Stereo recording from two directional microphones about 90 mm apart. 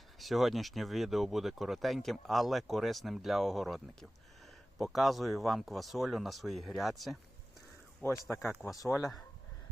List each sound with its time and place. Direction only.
0.2 s speech: centre (ahead or behind)
4.8 s speech: centre (ahead or behind)
8.3 s speech: 30° left (ahead or behind)
8.8 s speech: 40° left (ahead or behind)